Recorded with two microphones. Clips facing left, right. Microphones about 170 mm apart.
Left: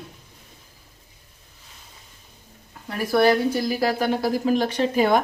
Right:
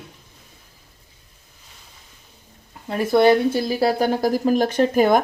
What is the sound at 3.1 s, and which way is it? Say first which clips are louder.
A woman's voice: right 3 dB; 20° right (ahead or behind).